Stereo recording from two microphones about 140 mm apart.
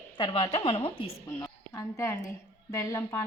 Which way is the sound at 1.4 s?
20° left (ahead or behind).